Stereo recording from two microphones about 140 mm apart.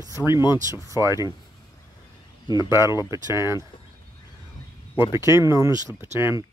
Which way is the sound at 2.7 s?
20° right (ahead or behind).